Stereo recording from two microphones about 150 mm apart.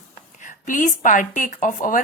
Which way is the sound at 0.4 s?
60° left (ahead or behind).